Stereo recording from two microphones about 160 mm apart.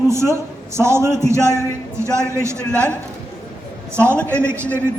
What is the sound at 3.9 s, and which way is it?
Speech, 15° right (ahead or behind).